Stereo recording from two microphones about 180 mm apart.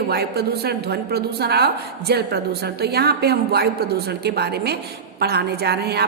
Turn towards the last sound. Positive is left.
turn(degrees=-65)  # may be behind; listen again after turning